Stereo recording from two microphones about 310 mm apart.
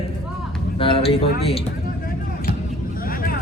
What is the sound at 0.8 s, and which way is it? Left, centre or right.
Speech, centre.